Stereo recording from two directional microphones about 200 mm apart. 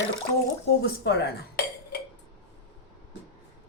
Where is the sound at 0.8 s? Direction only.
55° left (ahead or behind).